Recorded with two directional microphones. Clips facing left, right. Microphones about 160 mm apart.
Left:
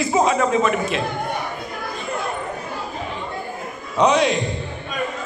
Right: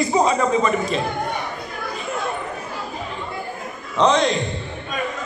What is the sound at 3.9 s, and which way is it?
Speech, 10° left (ahead or behind).